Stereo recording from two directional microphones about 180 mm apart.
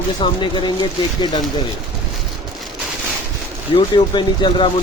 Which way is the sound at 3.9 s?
25° left (ahead or behind).